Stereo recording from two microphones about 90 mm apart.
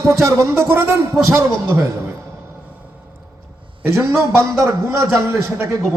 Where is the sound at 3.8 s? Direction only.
30° right (ahead or behind).